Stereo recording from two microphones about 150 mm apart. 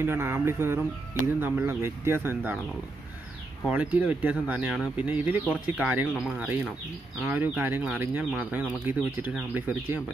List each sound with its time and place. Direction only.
0.0 s speech: 15° right (ahead or behind)
3.6 s speech: 10° right (ahead or behind)